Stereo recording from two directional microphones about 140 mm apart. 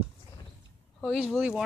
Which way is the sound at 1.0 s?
Centre (ahead or behind).